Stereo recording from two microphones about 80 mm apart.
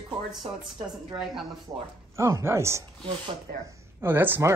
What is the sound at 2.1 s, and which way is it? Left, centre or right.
Speech, right.